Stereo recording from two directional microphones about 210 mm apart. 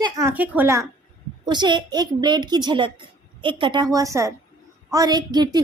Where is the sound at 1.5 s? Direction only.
20° right (ahead or behind).